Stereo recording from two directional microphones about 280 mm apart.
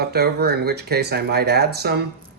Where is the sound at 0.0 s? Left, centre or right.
Right.